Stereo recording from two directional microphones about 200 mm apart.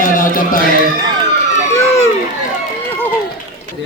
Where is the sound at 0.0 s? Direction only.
45° left (ahead or behind).